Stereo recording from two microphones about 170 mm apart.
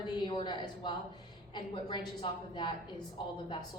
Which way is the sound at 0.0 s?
25° left (ahead or behind).